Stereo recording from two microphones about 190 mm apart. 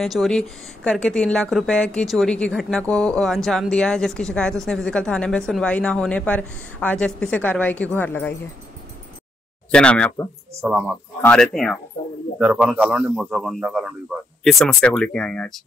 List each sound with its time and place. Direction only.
0.0 s speech: centre (ahead or behind)
9.7 s speech: 5° left (ahead or behind)
10.6 s speech: 5° right (ahead or behind)
11.2 s speech: 5° left (ahead or behind)